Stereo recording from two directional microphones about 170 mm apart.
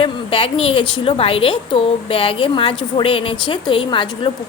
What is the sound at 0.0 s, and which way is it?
A woman's voice, 35° left (ahead or behind).